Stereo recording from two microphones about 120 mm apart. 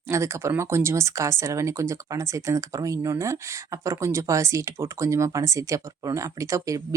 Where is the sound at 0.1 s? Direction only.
25° right (ahead or behind).